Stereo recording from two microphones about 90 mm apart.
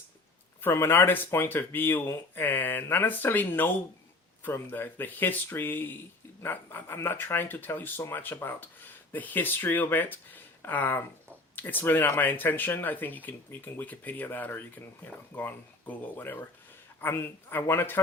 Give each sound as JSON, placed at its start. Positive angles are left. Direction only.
{"t": 0.6, "sound": "speech", "side_deg": 25}